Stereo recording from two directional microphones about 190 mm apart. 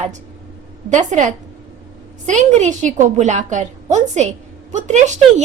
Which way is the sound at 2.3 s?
40° right (ahead or behind).